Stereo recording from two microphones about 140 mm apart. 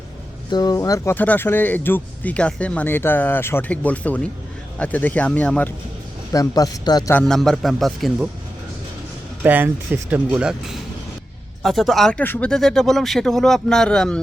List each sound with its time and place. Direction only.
0.5 s speech: 30° left (ahead or behind); by 5.7 s 10° left (ahead or behind)
6.3 s speech: 25° left (ahead or behind)
7.1 s speech: 10° left (ahead or behind)
7.3 s speech: centre (ahead or behind)
9.4 s speech: 15° right (ahead or behind); by 14.2 s 5° left (ahead or behind)